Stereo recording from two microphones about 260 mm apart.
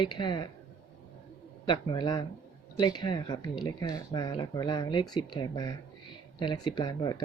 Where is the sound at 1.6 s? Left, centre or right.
Centre.